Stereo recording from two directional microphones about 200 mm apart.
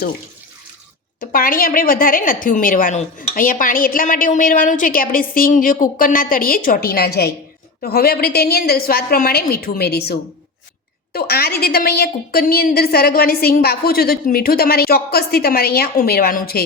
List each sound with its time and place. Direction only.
1.2 s a woman's voice: 45° left (ahead or behind)